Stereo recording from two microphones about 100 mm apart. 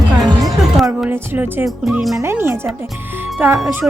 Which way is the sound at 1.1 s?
20° right (ahead or behind).